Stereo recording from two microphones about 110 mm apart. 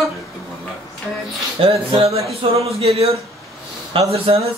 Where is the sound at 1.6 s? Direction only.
55° right (ahead or behind).